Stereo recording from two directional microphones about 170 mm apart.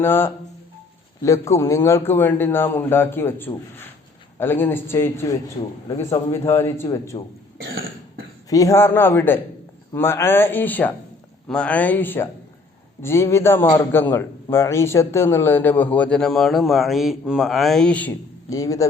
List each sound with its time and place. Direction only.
0.0 s speech: 15° left (ahead or behind)
8.4 s speech: 20° left (ahead or behind)